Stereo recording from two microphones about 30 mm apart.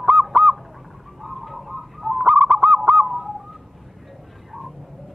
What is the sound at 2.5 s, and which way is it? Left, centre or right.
Honk, right.